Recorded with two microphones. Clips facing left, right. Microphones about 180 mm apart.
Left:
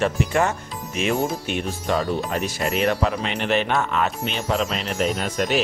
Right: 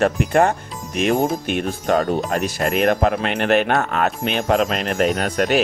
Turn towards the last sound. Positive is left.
turn(degrees=-55)  # may be behind; listen again after turning